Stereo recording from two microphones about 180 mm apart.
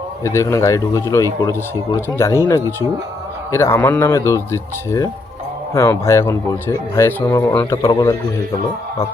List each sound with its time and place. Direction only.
0.3 s speech: 15° left (ahead or behind)
3.5 s speech: 15° left (ahead or behind)